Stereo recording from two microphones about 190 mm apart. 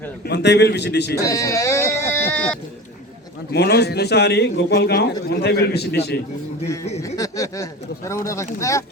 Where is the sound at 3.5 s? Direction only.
60° left (ahead or behind).